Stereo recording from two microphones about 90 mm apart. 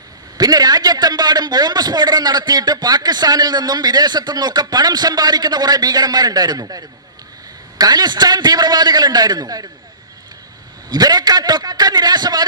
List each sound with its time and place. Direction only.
0.3 s a man's voice: 45° right (ahead or behind)
10.8 s a man's voice: 50° right (ahead or behind)